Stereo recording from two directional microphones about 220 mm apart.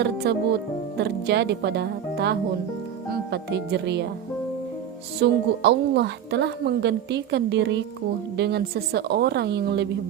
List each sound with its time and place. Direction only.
0.2 s a woman's voice: 50° right (ahead or behind)
5.2 s a woman's voice: 50° right (ahead or behind)